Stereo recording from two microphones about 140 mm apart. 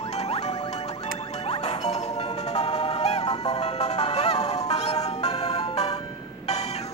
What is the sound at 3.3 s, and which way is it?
Music, 30° left (ahead or behind).